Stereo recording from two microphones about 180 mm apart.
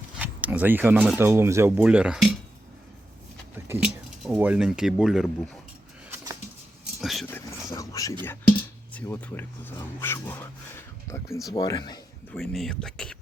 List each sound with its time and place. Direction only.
0.2 s speech: 10° right (ahead or behind)
3.5 s speech: 10° right (ahead or behind)
7.0 s speech: centre (ahead or behind)
7.3 s speech: 15° left (ahead or behind)
12.4 s speech: centre (ahead or behind)